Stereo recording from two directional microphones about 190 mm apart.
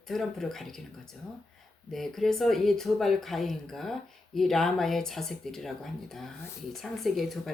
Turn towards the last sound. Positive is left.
turn(degrees=0)  # may be behind; listen again after turning